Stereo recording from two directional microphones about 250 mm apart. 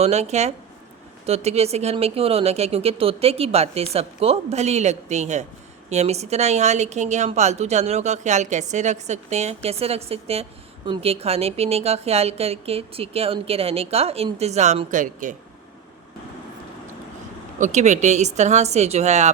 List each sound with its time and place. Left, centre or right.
0.0 s a woman's voice: right
17.6 s a woman's voice: right